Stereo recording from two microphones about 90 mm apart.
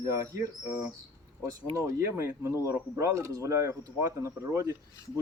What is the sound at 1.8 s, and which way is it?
Speech, 35° right (ahead or behind).